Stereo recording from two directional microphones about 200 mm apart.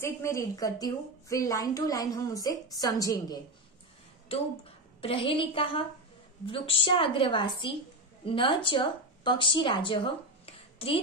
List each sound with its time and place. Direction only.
0.0 s a woman's voice: 15° left (ahead or behind)
4.3 s a woman's voice: 30° left (ahead or behind)